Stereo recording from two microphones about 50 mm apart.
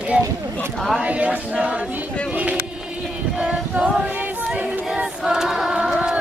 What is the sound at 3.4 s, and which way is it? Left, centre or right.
Choir, right.